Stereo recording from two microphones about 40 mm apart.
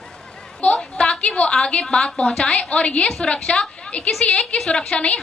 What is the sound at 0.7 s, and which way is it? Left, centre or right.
A woman's voice, left.